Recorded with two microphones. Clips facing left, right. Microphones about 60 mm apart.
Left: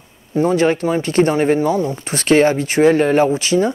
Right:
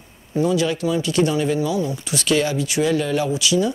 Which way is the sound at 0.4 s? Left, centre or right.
Left.